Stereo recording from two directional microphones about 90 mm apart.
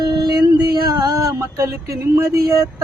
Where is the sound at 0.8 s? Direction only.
50° right (ahead or behind).